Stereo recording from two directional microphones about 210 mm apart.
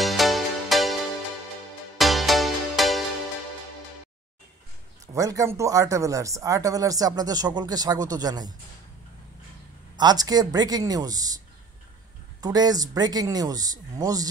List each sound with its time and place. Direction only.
0.0 s music: centre (ahead or behind)
2.0 s music: centre (ahead or behind)
5.0 s speech: 15° right (ahead or behind)
9.9 s speech: 20° right (ahead or behind)
12.4 s speech: 20° right (ahead or behind)